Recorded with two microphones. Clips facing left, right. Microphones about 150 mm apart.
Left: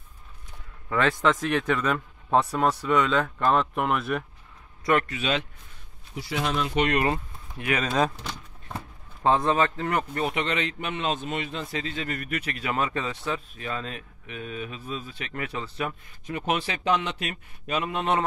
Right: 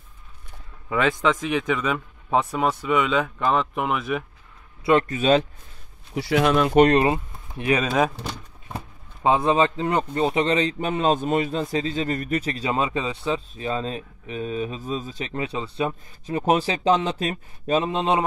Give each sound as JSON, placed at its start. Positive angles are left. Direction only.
{"t": 0.8, "sound": "a man's voice", "side_deg": -5}
{"t": 5.0, "sound": "speech", "side_deg": -40}
{"t": 6.1, "sound": "speech", "side_deg": -70}
{"t": 7.1, "sound": "speech", "side_deg": -20}
{"t": 12.6, "sound": "speech", "side_deg": -20}
{"t": 15.3, "sound": "speech", "side_deg": -25}